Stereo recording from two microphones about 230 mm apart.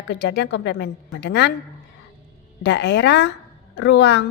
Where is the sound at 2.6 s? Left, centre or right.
Left.